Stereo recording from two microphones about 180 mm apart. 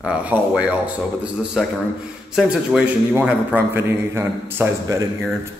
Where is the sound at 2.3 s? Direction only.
5° right (ahead or behind).